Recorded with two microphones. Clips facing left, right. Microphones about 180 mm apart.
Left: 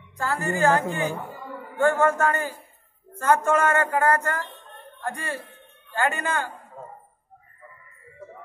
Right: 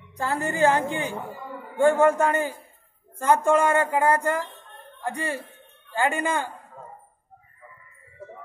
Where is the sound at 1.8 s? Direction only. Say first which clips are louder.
Right 2 dB; 15° right (ahead or behind).